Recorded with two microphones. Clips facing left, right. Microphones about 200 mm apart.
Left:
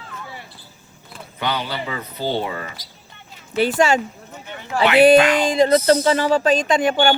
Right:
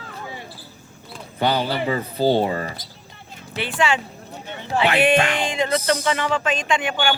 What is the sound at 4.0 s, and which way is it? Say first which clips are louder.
Speech: left 4 dB; 35° right (ahead or behind).